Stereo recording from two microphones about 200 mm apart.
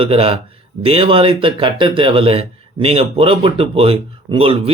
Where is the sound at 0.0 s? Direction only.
30° right (ahead or behind).